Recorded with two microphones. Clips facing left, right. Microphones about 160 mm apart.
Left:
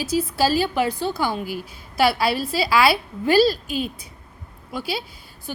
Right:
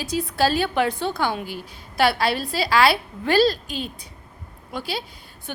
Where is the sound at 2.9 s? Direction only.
5° left (ahead or behind).